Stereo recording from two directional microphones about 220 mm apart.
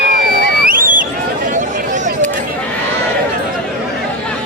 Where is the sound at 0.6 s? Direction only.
40° right (ahead or behind).